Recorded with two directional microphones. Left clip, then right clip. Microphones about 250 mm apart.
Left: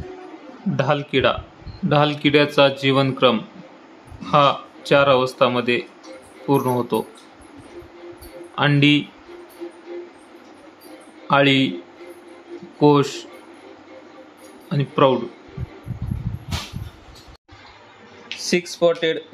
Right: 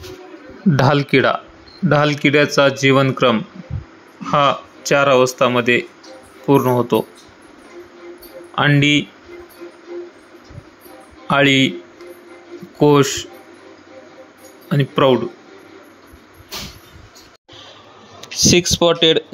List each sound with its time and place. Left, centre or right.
0.7 s speech: right; by 7.1 s centre
8.5 s speech: centre
11.2 s speech: centre
12.7 s speech: centre
14.7 s speech: centre
18.4 s speech: right